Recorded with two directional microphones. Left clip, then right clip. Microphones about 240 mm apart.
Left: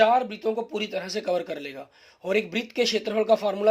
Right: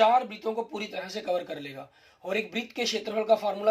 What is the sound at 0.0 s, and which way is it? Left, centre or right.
Speech, left.